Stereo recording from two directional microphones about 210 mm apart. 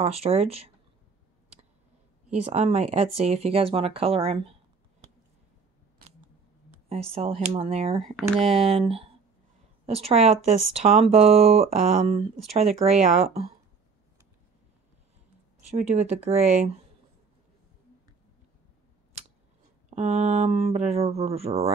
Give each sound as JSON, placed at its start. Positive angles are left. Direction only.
{"t": 0.0, "sound": "speech", "side_deg": -30}
{"t": 2.3, "sound": "speech", "side_deg": -30}
{"t": 6.9, "sound": "speech", "side_deg": -30}
{"t": 15.9, "sound": "speech", "side_deg": -30}
{"t": 19.9, "sound": "speech", "side_deg": -30}